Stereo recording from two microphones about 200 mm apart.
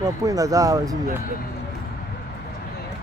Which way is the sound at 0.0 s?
15° right (ahead or behind).